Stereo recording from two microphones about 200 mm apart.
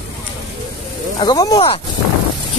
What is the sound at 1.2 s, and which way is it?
Speech, 20° left (ahead or behind).